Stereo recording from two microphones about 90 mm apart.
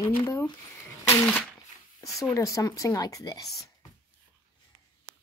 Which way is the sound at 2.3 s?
35° left (ahead or behind).